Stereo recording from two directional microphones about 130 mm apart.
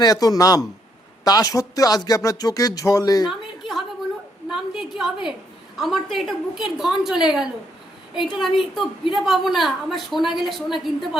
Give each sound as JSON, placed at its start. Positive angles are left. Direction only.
{"t": 0.0, "sound": "speech", "side_deg": 30}
{"t": 3.2, "sound": "a sound", "side_deg": 0}
{"t": 5.7, "sound": "a woman's voice", "side_deg": 0}